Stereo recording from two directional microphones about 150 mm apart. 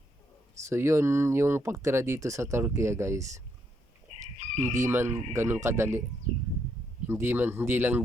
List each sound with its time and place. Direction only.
0.7 s speech: 15° right (ahead or behind)
4.2 s chicken: 55° right (ahead or behind)
4.7 s speech: 15° right (ahead or behind)
7.1 s speech: 15° right (ahead or behind)